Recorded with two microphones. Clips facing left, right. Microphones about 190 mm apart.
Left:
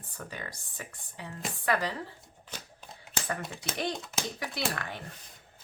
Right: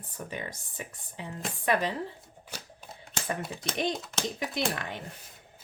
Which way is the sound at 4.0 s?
5° left (ahead or behind).